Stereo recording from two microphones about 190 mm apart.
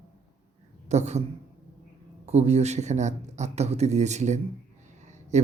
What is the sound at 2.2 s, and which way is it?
Speech, 35° right (ahead or behind).